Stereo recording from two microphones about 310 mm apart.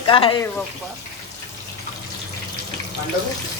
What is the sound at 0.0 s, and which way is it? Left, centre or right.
Speech, centre.